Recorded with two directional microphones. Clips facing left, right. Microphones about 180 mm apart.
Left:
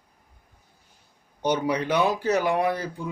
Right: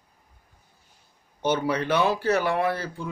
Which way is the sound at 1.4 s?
15° left (ahead or behind).